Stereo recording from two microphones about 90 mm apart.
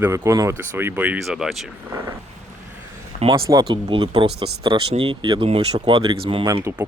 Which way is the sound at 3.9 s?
70° right (ahead or behind).